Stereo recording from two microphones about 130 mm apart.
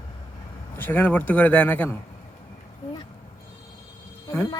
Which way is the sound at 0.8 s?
15° left (ahead or behind).